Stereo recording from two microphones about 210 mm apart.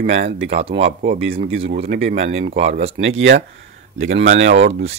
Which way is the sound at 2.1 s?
30° right (ahead or behind).